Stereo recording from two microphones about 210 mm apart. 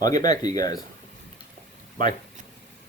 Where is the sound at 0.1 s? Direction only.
20° left (ahead or behind).